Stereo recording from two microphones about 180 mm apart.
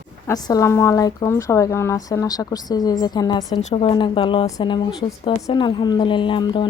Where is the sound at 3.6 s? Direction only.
35° left (ahead or behind).